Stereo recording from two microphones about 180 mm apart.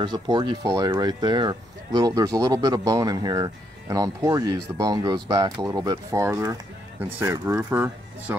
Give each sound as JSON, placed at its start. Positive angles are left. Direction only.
{"t": 0.0, "sound": "speech", "side_deg": -25}